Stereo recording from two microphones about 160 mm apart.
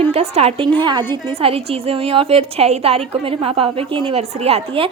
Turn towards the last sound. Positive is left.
turn(degrees=-35)  # may be behind; listen again after turning